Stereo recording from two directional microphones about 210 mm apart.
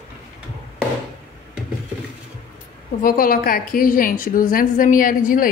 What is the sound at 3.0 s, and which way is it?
A woman's voice, 45° left (ahead or behind).